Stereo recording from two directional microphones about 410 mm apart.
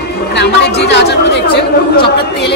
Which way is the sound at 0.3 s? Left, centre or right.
Left.